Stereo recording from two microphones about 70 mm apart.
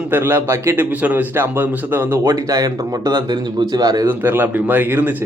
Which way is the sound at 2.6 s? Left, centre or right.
Right.